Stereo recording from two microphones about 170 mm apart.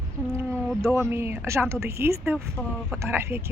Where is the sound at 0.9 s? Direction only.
15° right (ahead or behind).